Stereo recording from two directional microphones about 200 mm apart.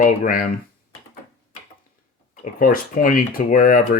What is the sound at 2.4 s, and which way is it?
Speech, 45° left (ahead or behind).